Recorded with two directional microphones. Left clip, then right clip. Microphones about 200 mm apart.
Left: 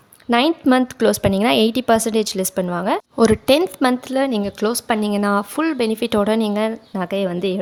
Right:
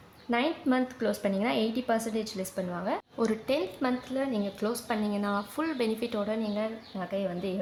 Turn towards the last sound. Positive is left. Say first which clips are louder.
# left 11 dB
turn(degrees=55)  # may be behind; listen again after turning